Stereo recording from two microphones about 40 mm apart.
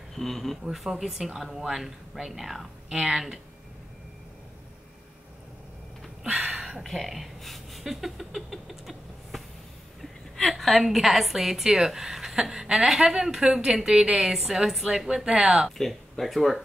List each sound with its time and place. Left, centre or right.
0.1 s a woman's voice: centre
0.7 s speech: centre
2.9 s speech: centre
6.3 s a sound: centre
6.8 s speech: centre
10.6 s a woman's voice: centre
13.4 s speech: right; by 14.9 s centre
15.1 s speech: centre
15.8 s a woman's voice: centre